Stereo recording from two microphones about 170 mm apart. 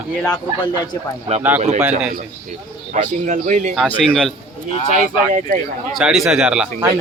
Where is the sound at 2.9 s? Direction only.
50° right (ahead or behind).